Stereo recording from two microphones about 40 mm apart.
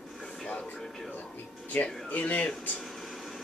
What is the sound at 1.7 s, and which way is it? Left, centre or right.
Speech, left.